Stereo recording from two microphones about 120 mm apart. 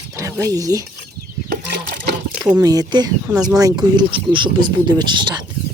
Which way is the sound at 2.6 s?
30° right (ahead or behind).